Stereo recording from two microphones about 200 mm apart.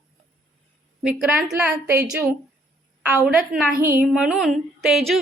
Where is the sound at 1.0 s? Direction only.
Centre (ahead or behind).